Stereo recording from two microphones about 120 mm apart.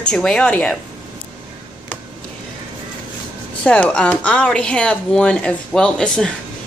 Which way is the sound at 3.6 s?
10° left (ahead or behind).